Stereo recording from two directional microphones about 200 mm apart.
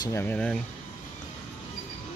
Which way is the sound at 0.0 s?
10° left (ahead or behind).